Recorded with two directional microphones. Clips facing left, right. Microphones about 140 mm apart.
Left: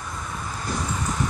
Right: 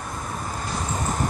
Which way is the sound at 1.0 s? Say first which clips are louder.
Right 1 dB; 45° right (ahead or behind).